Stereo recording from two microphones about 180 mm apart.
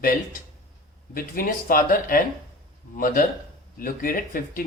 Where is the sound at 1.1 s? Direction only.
50° left (ahead or behind).